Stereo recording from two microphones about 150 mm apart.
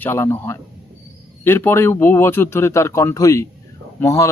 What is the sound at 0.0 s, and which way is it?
Speech, 15° left (ahead or behind).